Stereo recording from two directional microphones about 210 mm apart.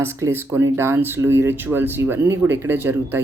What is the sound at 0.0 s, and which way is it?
Speech, 10° right (ahead or behind).